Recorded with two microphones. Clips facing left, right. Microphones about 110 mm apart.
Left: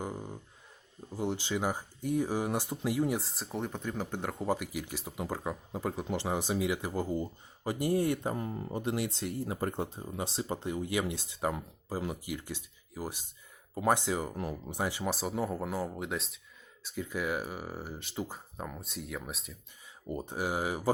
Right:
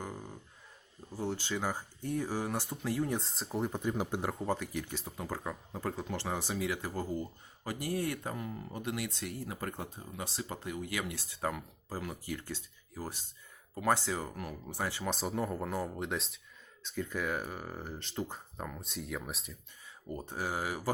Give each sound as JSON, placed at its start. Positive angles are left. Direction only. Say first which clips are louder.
{"t": 0.0, "sound": "a sound", "louder": "left 4 dB", "side_deg": 20}
{"t": 1.1, "sound": "speech", "louder": "left 3 dB", "side_deg": 15}
{"t": 3.2, "sound": "speech", "louder": "right 1 dB", "side_deg": 0}
{"t": 4.4, "sound": "speech", "louder": "left 2 dB", "side_deg": 10}
{"t": 15.1, "sound": "speech", "louder": "left 1 dB", "side_deg": 5}
{"t": 20.1, "sound": "speech", "louder": "left 3 dB", "side_deg": 15}